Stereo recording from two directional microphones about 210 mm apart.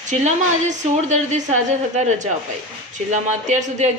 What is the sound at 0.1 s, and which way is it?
A woman's voice, 35° right (ahead or behind).